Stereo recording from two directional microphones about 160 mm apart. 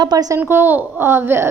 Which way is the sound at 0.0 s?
25° right (ahead or behind).